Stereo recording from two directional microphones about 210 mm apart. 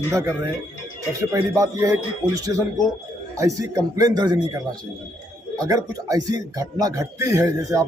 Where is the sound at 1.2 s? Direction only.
15° right (ahead or behind).